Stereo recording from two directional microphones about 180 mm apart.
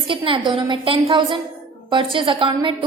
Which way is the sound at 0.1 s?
30° right (ahead or behind).